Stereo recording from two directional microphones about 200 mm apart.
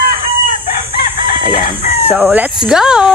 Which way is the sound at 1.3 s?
45° left (ahead or behind).